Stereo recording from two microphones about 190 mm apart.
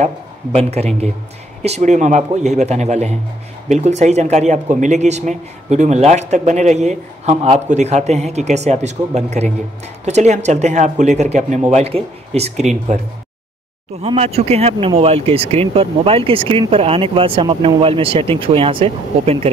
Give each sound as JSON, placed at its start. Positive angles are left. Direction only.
{"t": 0.6, "sound": "speech", "side_deg": -35}
{"t": 14.0, "sound": "speech", "side_deg": -30}